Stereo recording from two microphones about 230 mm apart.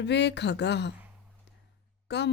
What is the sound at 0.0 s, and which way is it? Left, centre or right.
Speech, left.